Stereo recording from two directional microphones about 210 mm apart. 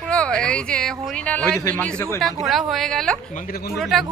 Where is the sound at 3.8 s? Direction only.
Centre (ahead or behind).